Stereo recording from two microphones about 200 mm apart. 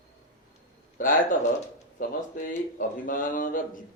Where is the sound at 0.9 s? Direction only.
40° left (ahead or behind).